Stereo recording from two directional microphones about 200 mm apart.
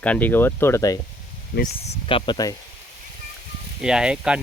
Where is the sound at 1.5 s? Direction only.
60° left (ahead or behind).